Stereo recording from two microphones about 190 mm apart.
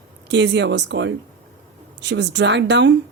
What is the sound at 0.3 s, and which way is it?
Speech, 65° right (ahead or behind).